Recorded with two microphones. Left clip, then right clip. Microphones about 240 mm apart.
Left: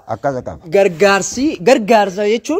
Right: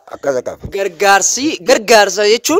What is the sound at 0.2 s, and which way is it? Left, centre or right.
Speech, right.